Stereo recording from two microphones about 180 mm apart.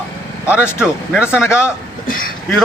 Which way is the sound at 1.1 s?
5° right (ahead or behind).